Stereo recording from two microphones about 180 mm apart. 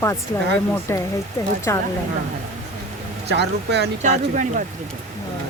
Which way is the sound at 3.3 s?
70° right (ahead or behind).